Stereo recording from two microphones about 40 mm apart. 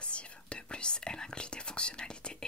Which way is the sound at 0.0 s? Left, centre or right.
Left.